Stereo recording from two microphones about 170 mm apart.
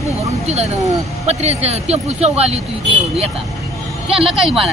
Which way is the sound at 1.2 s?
40° right (ahead or behind).